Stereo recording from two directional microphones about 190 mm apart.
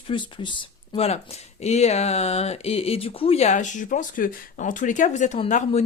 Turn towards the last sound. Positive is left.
turn(degrees=35)  # may be behind; listen again after turning